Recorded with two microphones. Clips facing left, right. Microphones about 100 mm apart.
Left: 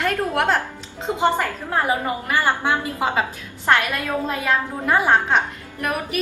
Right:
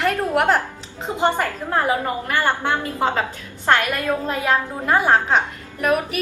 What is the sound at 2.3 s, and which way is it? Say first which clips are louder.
Speech: left 1 dB; 15° left (ahead or behind).